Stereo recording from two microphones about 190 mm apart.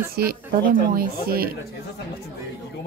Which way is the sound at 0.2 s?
55° right (ahead or behind).